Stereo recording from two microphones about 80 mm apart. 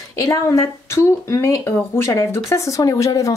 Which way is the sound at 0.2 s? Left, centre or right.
Left.